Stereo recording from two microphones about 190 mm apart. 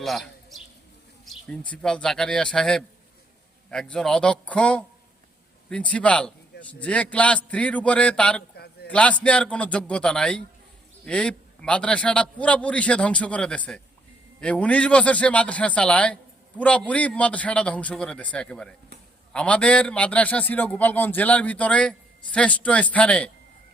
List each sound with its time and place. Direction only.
0.0 s a man's voice: centre (ahead or behind)
8.5 s a sound: 55° left (ahead or behind)
8.9 s a man's voice: 5° left (ahead or behind)